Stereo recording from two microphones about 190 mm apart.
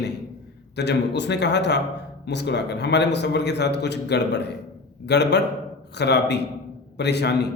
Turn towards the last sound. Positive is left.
turn(degrees=60)  # may be behind; listen again after turning